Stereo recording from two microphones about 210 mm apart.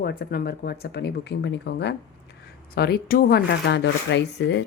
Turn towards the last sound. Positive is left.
turn(degrees=55)  # may be behind; listen again after turning